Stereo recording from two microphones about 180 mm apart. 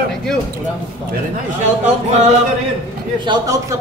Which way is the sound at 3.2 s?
20° right (ahead or behind).